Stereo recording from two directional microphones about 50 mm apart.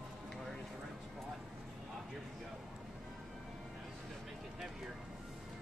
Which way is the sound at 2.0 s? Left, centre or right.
Centre.